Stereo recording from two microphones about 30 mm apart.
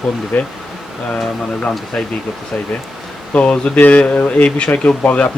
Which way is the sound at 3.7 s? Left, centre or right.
Left.